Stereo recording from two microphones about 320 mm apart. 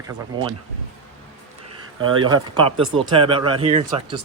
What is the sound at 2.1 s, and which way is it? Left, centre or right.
Speech, centre.